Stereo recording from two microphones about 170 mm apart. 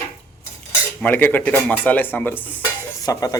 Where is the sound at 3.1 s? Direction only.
20° left (ahead or behind).